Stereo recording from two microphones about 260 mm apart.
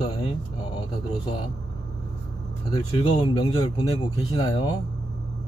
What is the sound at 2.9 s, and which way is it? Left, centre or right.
Speech, centre.